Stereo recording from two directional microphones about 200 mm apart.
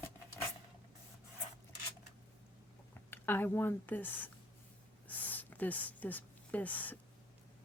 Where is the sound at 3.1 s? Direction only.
10° left (ahead or behind).